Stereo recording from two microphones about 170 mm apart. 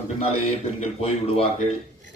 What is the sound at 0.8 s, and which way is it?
Speech, 35° left (ahead or behind).